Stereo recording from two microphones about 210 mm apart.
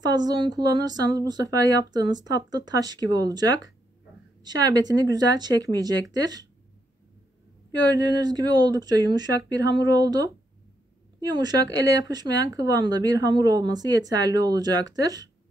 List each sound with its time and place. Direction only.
0.0 s speech: 20° right (ahead or behind)
7.8 s a woman's voice: 20° right (ahead or behind)